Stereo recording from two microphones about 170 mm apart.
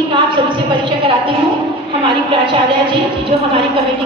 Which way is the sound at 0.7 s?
30° right (ahead or behind).